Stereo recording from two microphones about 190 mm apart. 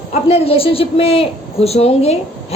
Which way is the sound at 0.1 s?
30° left (ahead or behind).